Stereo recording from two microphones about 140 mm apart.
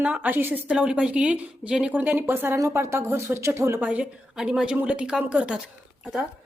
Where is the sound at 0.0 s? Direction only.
10° right (ahead or behind).